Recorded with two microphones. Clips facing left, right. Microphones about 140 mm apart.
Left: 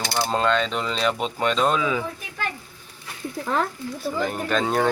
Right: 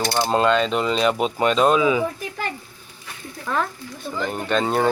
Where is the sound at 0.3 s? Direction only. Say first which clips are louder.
Right 3 dB; 5° right (ahead or behind).